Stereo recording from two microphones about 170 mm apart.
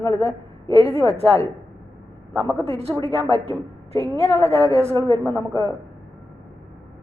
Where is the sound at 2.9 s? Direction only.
25° right (ahead or behind).